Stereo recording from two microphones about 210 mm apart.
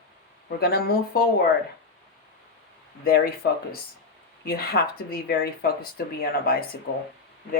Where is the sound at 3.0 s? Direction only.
45° left (ahead or behind).